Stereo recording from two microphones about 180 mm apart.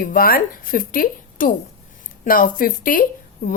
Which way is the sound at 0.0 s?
55° left (ahead or behind).